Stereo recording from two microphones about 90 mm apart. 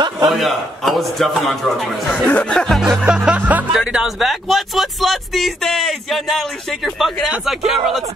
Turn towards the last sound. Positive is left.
turn(degrees=-5)  # may be behind; listen again after turning